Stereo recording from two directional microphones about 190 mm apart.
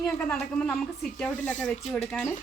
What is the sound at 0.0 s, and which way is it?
Speech, 5° left (ahead or behind).